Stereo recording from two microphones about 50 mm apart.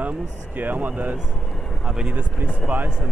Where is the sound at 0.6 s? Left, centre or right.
Right.